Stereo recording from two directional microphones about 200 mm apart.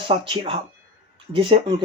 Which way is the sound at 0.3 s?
25° right (ahead or behind).